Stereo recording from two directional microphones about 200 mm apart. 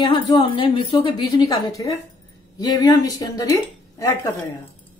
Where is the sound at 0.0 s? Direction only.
25° left (ahead or behind).